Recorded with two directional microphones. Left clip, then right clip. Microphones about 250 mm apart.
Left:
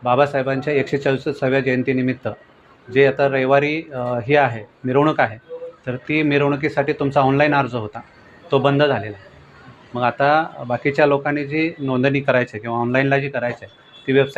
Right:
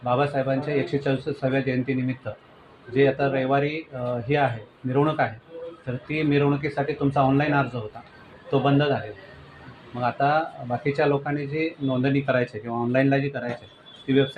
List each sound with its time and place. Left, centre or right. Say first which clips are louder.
0.0 s speech: left 6 dB; left
2.9 s speech: left 6 dB; left
10.0 s speech: left 6 dB; left